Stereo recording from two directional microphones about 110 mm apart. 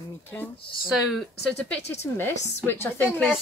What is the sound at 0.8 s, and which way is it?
A woman's voice, 5° right (ahead or behind).